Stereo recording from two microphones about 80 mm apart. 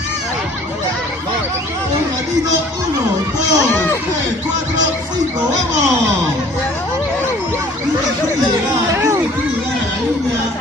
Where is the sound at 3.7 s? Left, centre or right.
Left.